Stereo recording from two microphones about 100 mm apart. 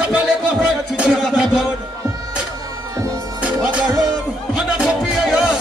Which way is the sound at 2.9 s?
35° right (ahead or behind).